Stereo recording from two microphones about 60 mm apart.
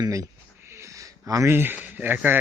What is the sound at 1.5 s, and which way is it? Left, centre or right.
Speech, right.